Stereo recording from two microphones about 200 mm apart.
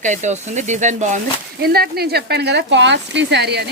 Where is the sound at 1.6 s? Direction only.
50° right (ahead or behind).